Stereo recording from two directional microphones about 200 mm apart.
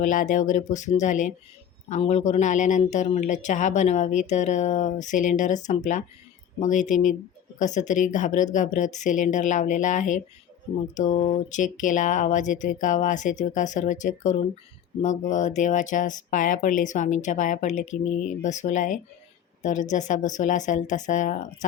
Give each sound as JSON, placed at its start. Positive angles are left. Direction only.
{"t": 0.0, "sound": "speech", "side_deg": 40}